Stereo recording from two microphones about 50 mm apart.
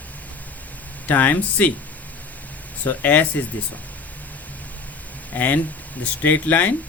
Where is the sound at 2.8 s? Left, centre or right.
Left.